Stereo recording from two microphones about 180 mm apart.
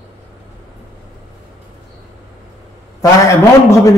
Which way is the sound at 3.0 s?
20° left (ahead or behind).